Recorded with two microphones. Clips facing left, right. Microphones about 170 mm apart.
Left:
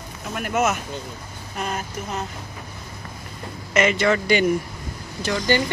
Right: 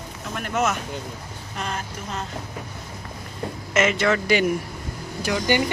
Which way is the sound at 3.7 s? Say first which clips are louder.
Left 2 dB; centre (ahead or behind).